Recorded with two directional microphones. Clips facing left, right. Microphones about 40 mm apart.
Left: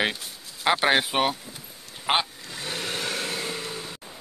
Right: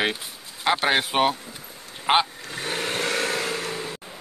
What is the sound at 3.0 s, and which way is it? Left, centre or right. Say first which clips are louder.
Vehicle: right 5 dB; right.